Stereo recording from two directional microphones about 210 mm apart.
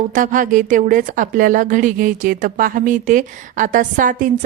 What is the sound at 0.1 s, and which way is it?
Speech, 40° right (ahead or behind).